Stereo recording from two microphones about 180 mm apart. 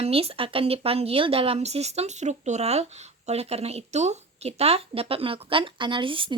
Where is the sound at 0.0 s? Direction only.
35° right (ahead or behind).